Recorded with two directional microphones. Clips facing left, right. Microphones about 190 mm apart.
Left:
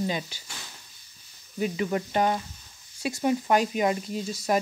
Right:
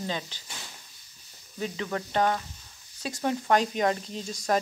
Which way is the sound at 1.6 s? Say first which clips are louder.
Left 5 dB; 10° left (ahead or behind).